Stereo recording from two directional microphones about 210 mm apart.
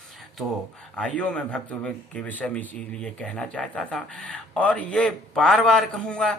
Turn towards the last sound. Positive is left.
turn(degrees=5)  # may be behind; listen again after turning